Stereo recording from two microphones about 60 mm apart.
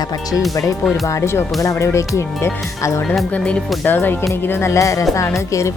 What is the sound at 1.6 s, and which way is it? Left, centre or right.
Speech, left.